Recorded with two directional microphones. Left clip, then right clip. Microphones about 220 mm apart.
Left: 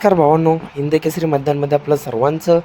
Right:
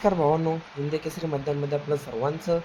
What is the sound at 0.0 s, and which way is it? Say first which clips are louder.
Speech: left 10 dB; 45° left (ahead or behind).